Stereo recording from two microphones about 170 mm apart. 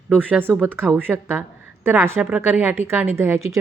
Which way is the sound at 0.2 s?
10° right (ahead or behind).